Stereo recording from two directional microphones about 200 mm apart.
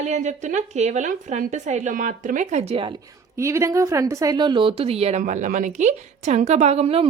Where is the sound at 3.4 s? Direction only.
15° right (ahead or behind); by 7.0 s 30° right (ahead or behind).